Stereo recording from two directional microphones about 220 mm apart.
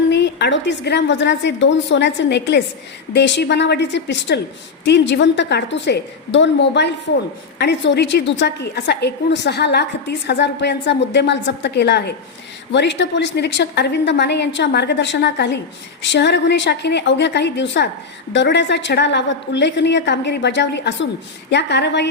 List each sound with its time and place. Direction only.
0.1 s a woman's voice: 50° left (ahead or behind)